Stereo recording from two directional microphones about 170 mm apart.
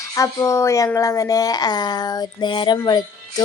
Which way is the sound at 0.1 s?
20° left (ahead or behind).